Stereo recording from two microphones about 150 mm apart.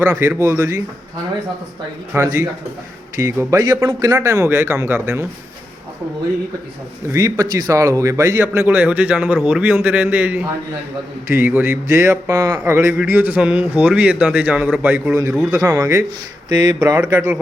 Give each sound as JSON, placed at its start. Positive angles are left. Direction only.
{"t": 0.0, "sound": "speech", "side_deg": -15}
{"t": 2.1, "sound": "a man's voice", "side_deg": -15}
{"t": 7.1, "sound": "speech", "side_deg": -20}
{"t": 15.5, "sound": "a man's voice", "side_deg": -25}